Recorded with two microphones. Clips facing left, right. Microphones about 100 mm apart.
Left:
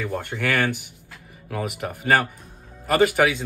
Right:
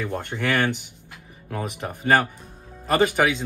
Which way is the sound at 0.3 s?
Centre (ahead or behind).